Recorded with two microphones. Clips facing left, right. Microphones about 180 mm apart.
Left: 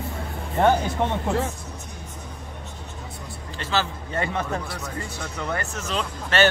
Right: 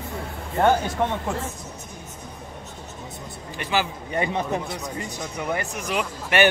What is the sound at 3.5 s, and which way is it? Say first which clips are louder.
Speech: right 1 dB; 15° right (ahead or behind).